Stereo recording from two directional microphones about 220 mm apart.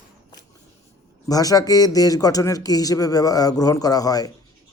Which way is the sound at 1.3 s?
15° left (ahead or behind).